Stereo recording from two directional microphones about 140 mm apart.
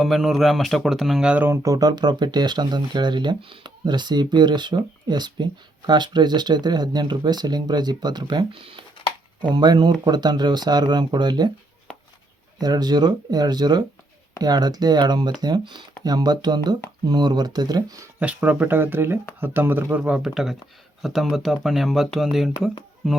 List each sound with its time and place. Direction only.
0.0 s speech: centre (ahead or behind)
1.6 s speech: 25° right (ahead or behind)
12.5 s speech: 30° right (ahead or behind)
18.2 s speech: 10° right (ahead or behind)